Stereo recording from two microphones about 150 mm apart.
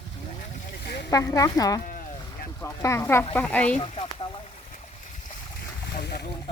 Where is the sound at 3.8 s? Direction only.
40° left (ahead or behind).